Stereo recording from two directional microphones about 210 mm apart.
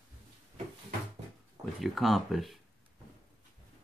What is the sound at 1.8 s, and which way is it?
Speech, centre (ahead or behind).